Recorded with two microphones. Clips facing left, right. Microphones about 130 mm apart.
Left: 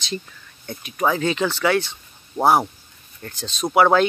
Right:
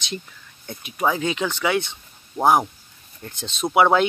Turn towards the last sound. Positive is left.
turn(degrees=-15)  # may be behind; listen again after turning